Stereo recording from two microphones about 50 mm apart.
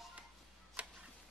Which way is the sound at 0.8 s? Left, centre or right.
Right.